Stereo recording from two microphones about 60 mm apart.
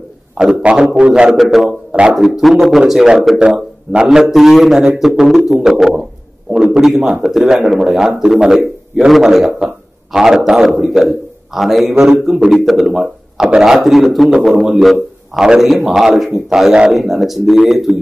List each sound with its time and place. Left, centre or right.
0.6 s a man's voice: centre
1.3 s a man's voice: centre
3.3 s a man's voice: centre